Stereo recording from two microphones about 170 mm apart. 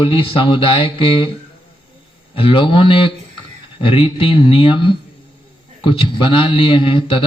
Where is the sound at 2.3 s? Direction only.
30° left (ahead or behind).